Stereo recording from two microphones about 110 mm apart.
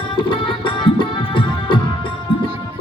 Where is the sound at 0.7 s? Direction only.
50° left (ahead or behind).